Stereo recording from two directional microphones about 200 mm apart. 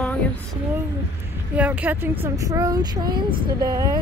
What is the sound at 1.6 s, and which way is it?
Speech, 10° right (ahead or behind).